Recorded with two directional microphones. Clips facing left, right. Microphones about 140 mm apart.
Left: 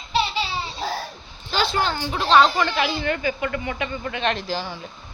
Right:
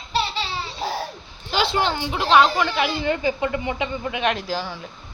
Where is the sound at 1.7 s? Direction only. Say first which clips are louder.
Right 1 dB; 20° right (ahead or behind).